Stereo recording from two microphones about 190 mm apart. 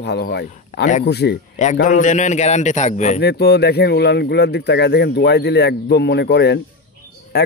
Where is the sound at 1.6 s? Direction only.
40° left (ahead or behind).